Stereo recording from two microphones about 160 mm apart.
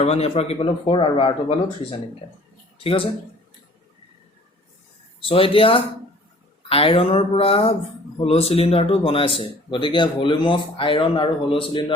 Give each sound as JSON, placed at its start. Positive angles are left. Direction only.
{"t": 0.0, "sound": "speech", "side_deg": 40}
{"t": 5.2, "sound": "speech", "side_deg": 35}